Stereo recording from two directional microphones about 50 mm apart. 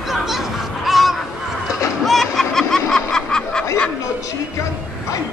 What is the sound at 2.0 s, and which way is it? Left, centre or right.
Snicker, centre.